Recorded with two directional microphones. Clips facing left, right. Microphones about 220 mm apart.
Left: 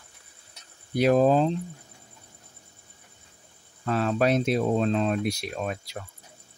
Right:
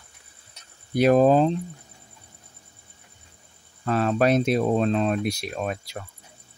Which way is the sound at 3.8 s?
50° right (ahead or behind).